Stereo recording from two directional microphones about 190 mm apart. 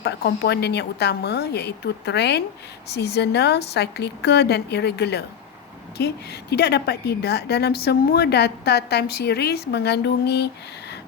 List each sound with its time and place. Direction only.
0.0 s a woman's voice: 60° left (ahead or behind)